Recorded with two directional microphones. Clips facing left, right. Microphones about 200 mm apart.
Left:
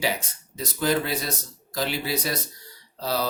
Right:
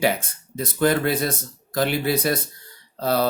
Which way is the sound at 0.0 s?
55° right (ahead or behind).